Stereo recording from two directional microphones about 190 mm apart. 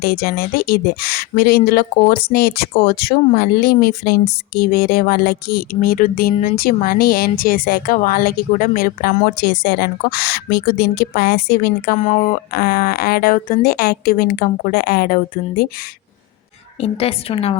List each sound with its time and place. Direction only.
0.0 s speech: 55° left (ahead or behind)
11.9 s speech: 40° left (ahead or behind)
16.8 s a woman's voice: 30° left (ahead or behind)